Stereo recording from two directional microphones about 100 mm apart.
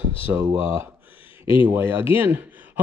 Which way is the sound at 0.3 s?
25° right (ahead or behind).